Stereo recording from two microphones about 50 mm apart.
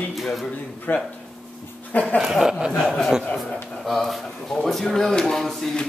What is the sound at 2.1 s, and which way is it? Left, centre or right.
Speech, centre.